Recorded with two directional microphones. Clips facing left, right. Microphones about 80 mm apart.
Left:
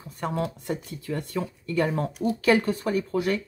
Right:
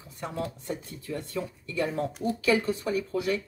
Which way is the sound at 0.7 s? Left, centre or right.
Left.